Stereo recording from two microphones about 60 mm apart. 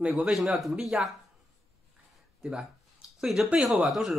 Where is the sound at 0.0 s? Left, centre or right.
Centre.